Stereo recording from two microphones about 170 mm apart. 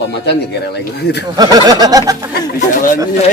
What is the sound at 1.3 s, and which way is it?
Speech, 25° right (ahead or behind).